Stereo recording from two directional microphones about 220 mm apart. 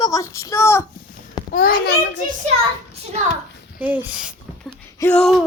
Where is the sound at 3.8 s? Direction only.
5° right (ahead or behind).